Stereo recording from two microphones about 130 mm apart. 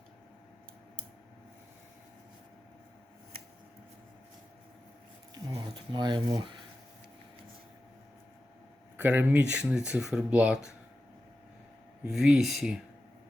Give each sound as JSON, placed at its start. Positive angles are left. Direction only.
{"t": 5.3, "sound": "a sound", "side_deg": -25}
{"t": 5.7, "sound": "speech", "side_deg": -35}
{"t": 9.0, "sound": "speech", "side_deg": -10}
{"t": 12.0, "sound": "speech", "side_deg": -5}